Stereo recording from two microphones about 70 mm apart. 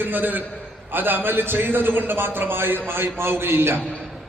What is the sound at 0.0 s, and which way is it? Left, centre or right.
A man's voice, right.